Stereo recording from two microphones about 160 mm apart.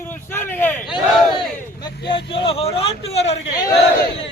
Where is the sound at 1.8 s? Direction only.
30° left (ahead or behind).